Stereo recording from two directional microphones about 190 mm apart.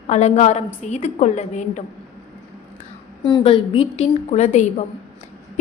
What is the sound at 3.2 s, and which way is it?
A woman's voice, 25° left (ahead or behind).